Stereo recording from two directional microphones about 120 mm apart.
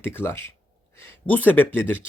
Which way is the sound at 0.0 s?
20° left (ahead or behind).